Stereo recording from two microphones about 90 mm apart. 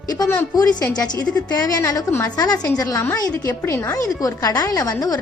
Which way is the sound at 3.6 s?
30° left (ahead or behind).